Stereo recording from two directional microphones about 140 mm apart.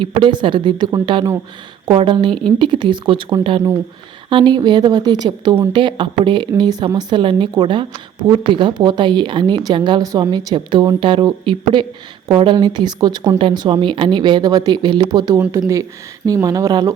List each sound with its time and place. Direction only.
0.0 s a woman's voice: 35° right (ahead or behind)